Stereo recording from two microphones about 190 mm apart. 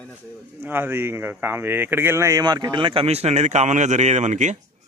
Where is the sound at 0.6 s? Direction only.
10° right (ahead or behind); by 4.5 s 40° right (ahead or behind).